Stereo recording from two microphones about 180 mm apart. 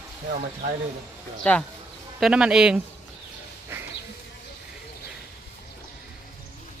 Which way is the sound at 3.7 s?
15° right (ahead or behind).